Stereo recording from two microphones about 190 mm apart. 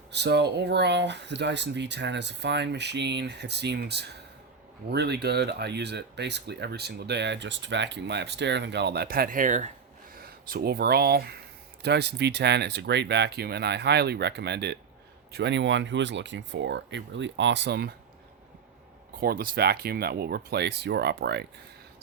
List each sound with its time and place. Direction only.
0.1 s speech: 65° right (ahead or behind); by 9.7 s 40° right (ahead or behind)
10.2 s speech: 50° right (ahead or behind)
19.1 s speech: 50° right (ahead or behind)